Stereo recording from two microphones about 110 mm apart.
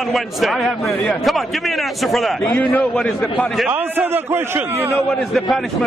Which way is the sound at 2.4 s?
15° left (ahead or behind).